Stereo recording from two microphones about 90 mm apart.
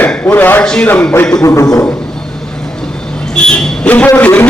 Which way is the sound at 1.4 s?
35° left (ahead or behind).